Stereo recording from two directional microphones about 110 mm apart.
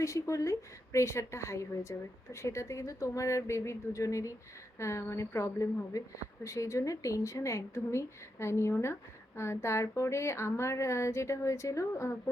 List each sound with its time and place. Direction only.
0.0 s speech: 30° left (ahead or behind)